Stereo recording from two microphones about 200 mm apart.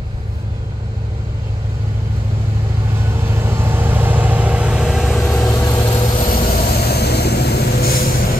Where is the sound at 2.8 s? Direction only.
10° right (ahead or behind).